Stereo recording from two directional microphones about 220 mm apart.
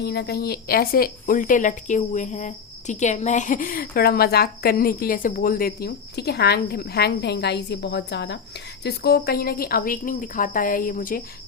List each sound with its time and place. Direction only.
0.0 s a woman's voice: 50° left (ahead or behind)